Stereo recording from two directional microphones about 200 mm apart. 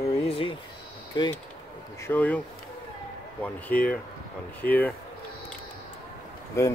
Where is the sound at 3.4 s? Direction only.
5° left (ahead or behind).